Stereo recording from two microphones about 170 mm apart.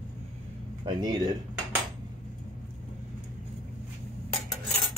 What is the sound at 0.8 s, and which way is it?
Speech, 25° right (ahead or behind).